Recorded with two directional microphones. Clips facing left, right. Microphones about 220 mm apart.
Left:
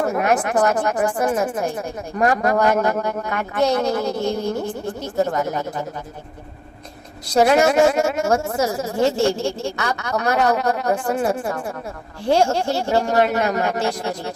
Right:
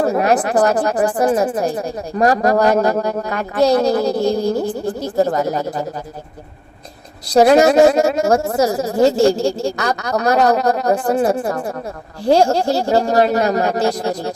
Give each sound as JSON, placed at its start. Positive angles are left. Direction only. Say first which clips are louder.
{"t": 0.0, "sound": "speech", "louder": "right 4 dB", "side_deg": -35}
{"t": 7.3, "sound": "speech", "louder": "right 5 dB", "side_deg": -35}